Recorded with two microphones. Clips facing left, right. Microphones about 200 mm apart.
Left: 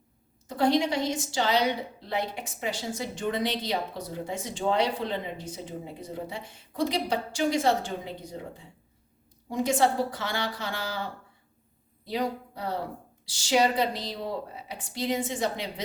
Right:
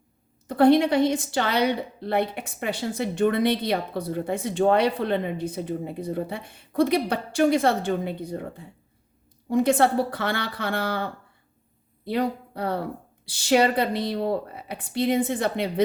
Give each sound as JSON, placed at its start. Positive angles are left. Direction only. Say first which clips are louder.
{"t": 0.4, "sound": "a woman's voice", "louder": "right 7 dB", "side_deg": -60}